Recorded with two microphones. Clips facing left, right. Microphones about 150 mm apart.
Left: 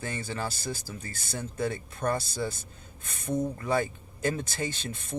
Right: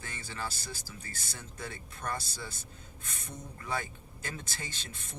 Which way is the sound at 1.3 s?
55° left (ahead or behind).